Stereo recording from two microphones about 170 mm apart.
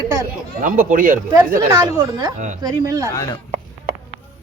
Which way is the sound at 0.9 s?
55° right (ahead or behind).